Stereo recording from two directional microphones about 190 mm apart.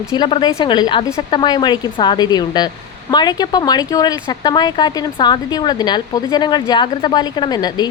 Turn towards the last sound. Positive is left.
turn(degrees=20)  # may be behind; listen again after turning